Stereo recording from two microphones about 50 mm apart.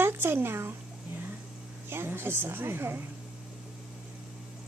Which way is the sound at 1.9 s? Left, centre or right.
Right.